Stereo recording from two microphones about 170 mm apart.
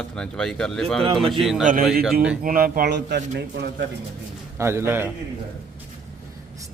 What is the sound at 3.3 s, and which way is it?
Speech, 80° right.